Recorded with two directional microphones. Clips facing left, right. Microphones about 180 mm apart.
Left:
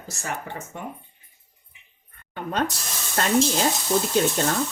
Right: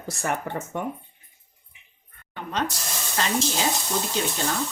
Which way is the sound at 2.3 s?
45° left (ahead or behind).